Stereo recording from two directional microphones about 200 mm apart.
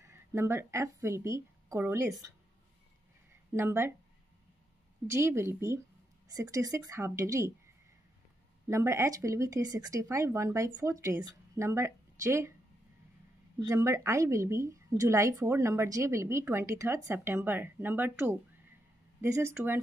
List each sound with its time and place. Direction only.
0.0 s speech: 15° right (ahead or behind)
3.5 s speech: 10° right (ahead or behind)
5.0 s speech: 15° right (ahead or behind)
8.6 s speech: 15° right (ahead or behind)
13.6 s speech: 15° right (ahead or behind)